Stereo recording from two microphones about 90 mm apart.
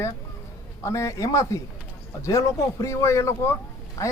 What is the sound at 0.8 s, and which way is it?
Speech, 35° left (ahead or behind).